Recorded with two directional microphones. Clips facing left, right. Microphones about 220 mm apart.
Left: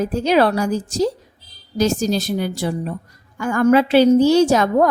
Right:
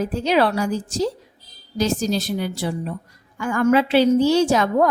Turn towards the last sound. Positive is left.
turn(degrees=40)  # may be behind; listen again after turning